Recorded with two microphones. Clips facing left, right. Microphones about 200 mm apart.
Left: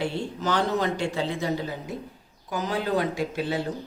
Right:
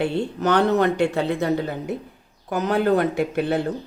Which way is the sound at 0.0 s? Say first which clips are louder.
Right 6 dB; 60° right (ahead or behind).